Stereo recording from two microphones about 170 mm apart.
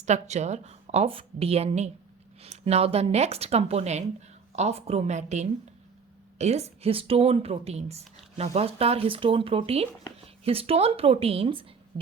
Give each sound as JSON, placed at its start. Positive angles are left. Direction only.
{"t": 0.0, "sound": "a woman's voice", "side_deg": -40}